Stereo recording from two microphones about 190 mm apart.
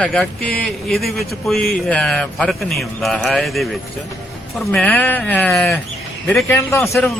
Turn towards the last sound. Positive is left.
turn(degrees=5)  # may be behind; listen again after turning